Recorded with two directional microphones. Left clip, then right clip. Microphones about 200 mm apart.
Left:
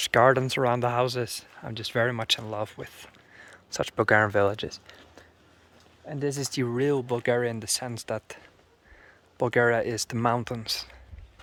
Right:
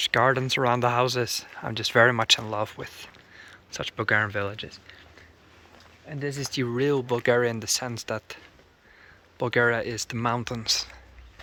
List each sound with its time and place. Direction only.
0.0 s speech: 20° left (ahead or behind); by 5.0 s 35° left (ahead or behind)
6.1 s speech: 35° left (ahead or behind); by 8.4 s 15° left (ahead or behind)
9.4 s speech: 20° left (ahead or behind)